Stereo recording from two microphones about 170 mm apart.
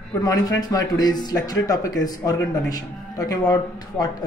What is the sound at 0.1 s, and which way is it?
A man's voice, 20° left (ahead or behind).